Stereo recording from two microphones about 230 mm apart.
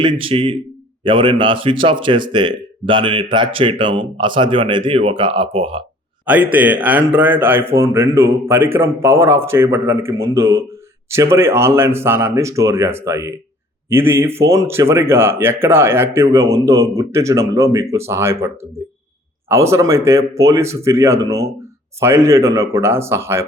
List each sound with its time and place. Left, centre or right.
0.0 s speech: right
6.2 s a man's voice: centre